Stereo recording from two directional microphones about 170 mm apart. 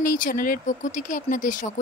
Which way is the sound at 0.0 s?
55° left (ahead or behind).